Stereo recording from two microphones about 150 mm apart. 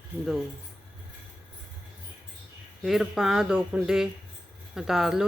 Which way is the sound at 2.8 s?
5° right (ahead or behind).